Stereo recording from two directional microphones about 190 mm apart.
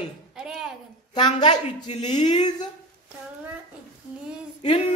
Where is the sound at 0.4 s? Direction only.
5° right (ahead or behind).